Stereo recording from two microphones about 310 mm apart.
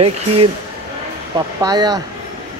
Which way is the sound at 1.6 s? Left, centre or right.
Centre.